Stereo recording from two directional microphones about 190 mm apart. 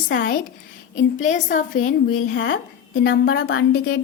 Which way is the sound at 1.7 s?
90° left.